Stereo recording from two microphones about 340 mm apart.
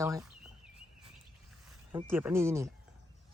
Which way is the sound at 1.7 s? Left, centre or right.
Centre.